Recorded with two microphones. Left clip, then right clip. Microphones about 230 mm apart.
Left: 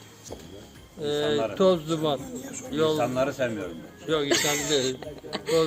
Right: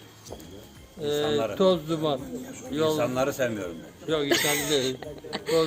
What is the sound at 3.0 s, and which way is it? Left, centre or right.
Speech, right.